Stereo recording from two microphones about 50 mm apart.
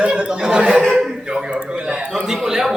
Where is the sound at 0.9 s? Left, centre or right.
Centre.